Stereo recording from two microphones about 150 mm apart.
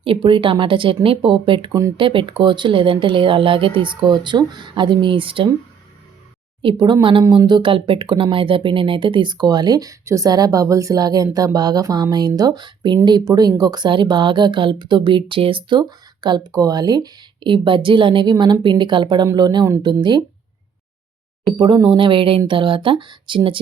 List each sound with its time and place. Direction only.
0.0 s speech: 35° right (ahead or behind)
6.6 s speech: 35° right (ahead or behind)
21.8 s speech: 30° right (ahead or behind)